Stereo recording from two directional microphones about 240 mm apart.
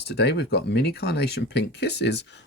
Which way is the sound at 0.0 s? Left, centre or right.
Left.